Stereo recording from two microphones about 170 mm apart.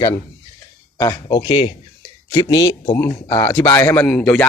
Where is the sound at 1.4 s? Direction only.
35° left (ahead or behind).